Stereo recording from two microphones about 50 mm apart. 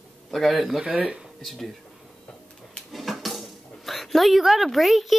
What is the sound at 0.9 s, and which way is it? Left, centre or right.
Speech, right.